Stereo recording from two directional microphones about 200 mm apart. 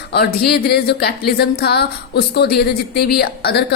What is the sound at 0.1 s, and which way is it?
Speech, 50° left (ahead or behind).